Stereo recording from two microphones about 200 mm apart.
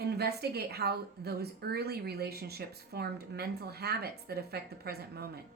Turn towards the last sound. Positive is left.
turn(degrees=-50)  # may be behind; listen again after turning